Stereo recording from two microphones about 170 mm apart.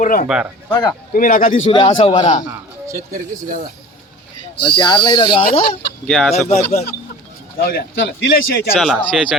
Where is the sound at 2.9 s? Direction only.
50° right (ahead or behind).